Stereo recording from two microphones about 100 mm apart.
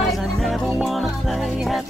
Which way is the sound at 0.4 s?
Centre (ahead or behind).